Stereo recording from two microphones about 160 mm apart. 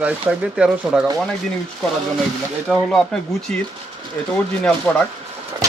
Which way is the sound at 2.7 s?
Centre (ahead or behind).